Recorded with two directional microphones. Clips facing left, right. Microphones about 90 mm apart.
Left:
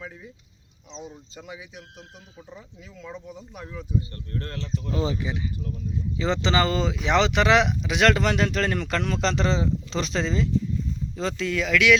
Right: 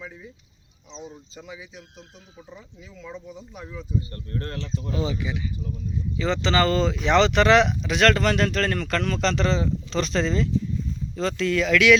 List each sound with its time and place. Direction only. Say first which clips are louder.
0.9 s speech: even; 5° left (ahead or behind)
4.1 s speech: right 2 dB; 30° right (ahead or behind)
4.9 s speech: left 1 dB; 30° left (ahead or behind); by 11.9 s centre (ahead or behind)